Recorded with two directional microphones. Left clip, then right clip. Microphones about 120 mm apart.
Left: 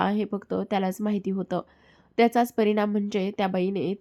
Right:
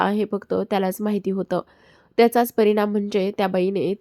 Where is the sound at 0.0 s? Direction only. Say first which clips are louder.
Right 5 dB; 30° right (ahead or behind).